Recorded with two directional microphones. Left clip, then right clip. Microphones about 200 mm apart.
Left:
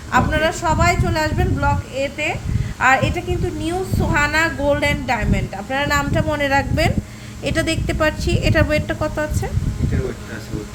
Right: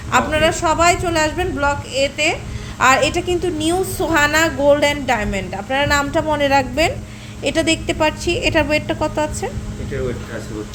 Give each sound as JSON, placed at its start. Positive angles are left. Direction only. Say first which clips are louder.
{"t": 0.1, "sound": "a woman's voice", "louder": "right 2 dB", "side_deg": -10}
{"t": 2.0, "sound": "a woman's voice", "louder": "right 4 dB", "side_deg": -25}